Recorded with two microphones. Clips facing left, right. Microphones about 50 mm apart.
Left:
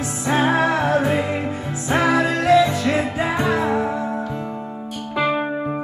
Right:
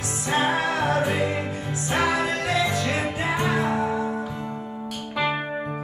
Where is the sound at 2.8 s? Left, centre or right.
Centre.